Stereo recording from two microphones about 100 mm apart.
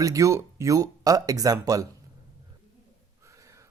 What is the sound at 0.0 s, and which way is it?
Speech, 35° right (ahead or behind).